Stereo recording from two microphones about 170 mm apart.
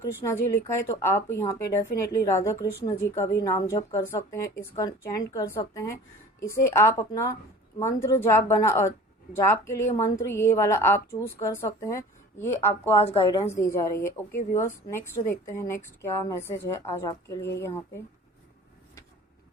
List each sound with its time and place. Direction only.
0.0 s a woman's voice: 15° left (ahead or behind)
12.9 s a woman's voice: 35° left (ahead or behind)
13.5 s a woman's voice: 15° left (ahead or behind)